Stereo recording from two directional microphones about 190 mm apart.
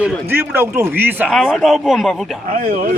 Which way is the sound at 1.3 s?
Centre (ahead or behind).